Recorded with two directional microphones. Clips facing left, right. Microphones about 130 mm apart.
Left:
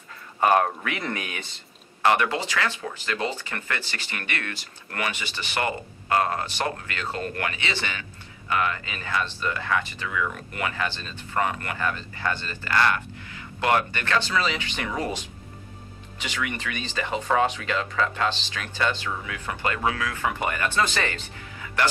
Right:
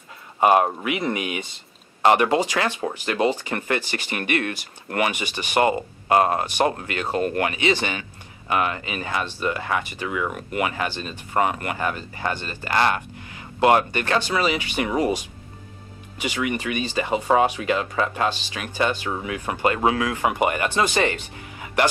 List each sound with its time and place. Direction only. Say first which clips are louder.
0.4 s speech: right 3 dB; 20° right (ahead or behind)
19.0 s speech: right 5 dB; 30° right (ahead or behind)
19.4 s speech: right 7 dB; 15° right (ahead or behind)
19.7 s speech: right 4 dB; 25° right (ahead or behind)